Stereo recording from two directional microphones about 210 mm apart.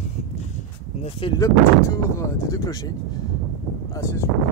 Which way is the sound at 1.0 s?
25° left (ahead or behind).